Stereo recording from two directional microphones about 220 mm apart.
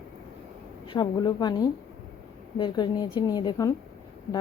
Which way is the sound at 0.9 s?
20° left (ahead or behind).